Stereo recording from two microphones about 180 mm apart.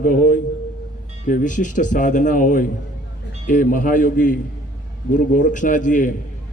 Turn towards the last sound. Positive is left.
turn(degrees=45)  # may be behind; listen again after turning